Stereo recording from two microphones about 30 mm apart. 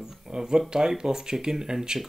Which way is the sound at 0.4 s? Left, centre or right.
Right.